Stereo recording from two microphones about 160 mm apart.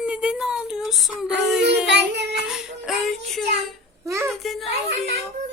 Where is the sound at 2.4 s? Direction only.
5° right (ahead or behind).